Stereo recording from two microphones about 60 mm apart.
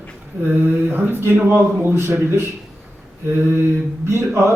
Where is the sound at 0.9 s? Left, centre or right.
Right.